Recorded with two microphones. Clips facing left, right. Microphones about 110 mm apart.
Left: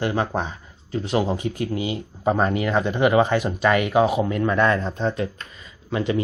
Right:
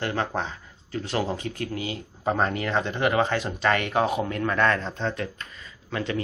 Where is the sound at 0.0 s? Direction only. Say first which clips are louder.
Left 4 dB; 15° left (ahead or behind).